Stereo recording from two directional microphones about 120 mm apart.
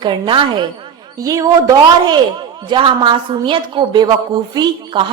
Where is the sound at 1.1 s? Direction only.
30° right (ahead or behind).